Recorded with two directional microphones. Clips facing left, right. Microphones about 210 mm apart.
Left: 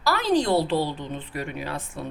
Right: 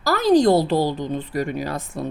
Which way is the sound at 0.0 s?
40° right (ahead or behind).